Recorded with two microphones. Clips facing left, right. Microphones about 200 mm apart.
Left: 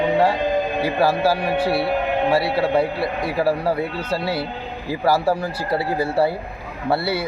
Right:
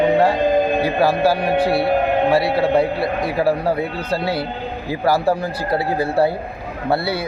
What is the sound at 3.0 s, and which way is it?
Speech, 20° right (ahead or behind).